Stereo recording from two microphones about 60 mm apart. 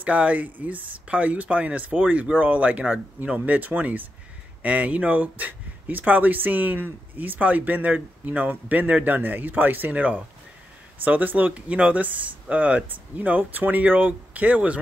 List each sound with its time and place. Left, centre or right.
0.0 s speech: right